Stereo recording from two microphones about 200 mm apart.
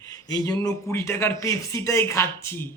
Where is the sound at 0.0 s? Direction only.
20° left (ahead or behind).